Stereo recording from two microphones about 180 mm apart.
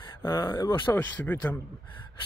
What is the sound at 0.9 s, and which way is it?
Speech, 10° left (ahead or behind).